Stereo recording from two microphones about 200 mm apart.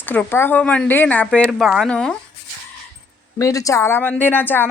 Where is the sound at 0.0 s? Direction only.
10° left (ahead or behind).